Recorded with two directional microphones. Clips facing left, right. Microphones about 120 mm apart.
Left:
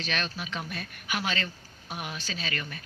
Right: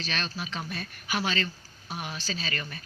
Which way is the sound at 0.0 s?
35° right (ahead or behind).